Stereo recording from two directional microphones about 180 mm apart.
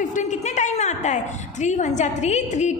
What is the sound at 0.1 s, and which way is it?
A woman's voice, 40° left (ahead or behind).